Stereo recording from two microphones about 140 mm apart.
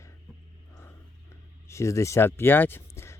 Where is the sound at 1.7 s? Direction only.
20° left (ahead or behind).